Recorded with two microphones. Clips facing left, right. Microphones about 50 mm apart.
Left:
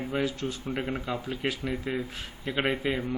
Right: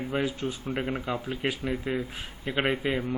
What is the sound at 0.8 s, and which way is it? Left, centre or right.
Speech, centre.